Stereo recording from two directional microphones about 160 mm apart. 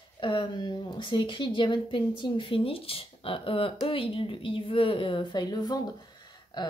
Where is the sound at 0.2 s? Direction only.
30° left (ahead or behind).